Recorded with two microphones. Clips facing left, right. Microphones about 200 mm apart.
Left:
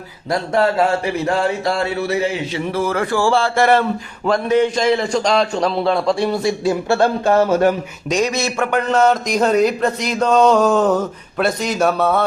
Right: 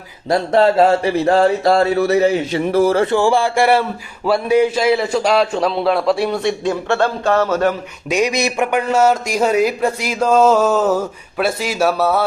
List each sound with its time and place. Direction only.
0.3 s speech: 30° right (ahead or behind)
2.9 s a man's voice: 25° right (ahead or behind); by 7.8 s 15° left (ahead or behind)
8.1 s a man's voice: 15° right (ahead or behind)